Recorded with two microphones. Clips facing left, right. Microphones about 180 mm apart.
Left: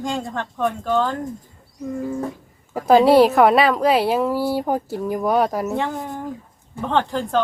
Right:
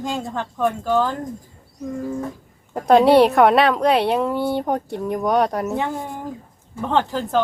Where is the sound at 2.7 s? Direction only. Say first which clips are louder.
Even; 5° left (ahead or behind).